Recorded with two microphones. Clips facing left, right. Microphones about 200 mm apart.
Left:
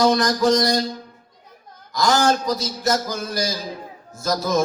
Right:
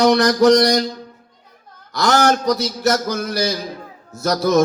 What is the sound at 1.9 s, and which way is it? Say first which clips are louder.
Speech: right 2 dB; 70° right (ahead or behind).